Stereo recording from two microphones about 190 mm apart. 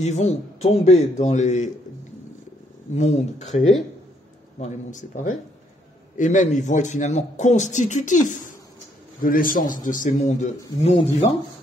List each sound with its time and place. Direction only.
0.0 s speech: 35° left (ahead or behind)
2.9 s a man's voice: 35° left (ahead or behind)